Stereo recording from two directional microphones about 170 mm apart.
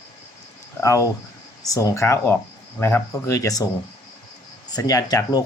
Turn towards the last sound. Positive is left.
turn(degrees=20)  # may be behind; listen again after turning